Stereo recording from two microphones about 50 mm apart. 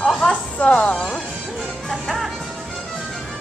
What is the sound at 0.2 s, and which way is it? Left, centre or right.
Music, left.